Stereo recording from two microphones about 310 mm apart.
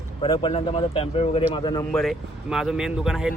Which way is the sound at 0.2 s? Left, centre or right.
Centre.